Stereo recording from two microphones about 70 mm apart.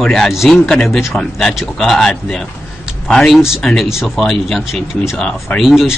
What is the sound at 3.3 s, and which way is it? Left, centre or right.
Speech, centre.